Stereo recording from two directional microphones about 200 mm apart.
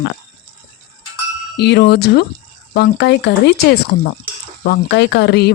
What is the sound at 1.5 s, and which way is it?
Speech, 55° left (ahead or behind).